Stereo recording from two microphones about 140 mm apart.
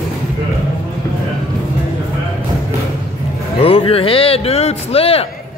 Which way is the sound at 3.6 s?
40° left (ahead or behind).